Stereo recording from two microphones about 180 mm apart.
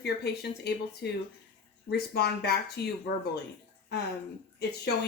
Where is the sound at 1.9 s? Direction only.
65° left (ahead or behind).